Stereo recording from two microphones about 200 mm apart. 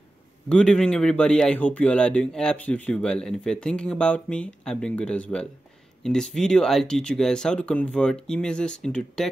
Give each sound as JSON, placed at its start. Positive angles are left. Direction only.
{"t": 0.5, "sound": "speech", "side_deg": 5}